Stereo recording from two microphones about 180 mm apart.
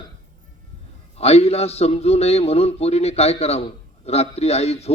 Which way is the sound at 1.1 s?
35° left (ahead or behind).